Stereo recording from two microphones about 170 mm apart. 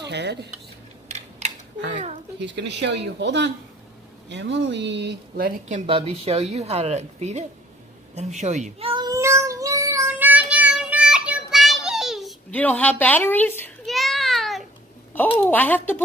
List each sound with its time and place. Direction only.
0.1 s dishes: 90° right
1.9 s speech: 45° right (ahead or behind)
2.4 s speech: 90° right; by 5.8 s 65° right (ahead or behind)
5.9 s a woman's voice: 35° right (ahead or behind)
8.1 s cat: 40° right (ahead or behind); by 13.7 s 10° left (ahead or behind)
13.8 s a sound: centre (ahead or behind)
15.3 s speech: 10° left (ahead or behind)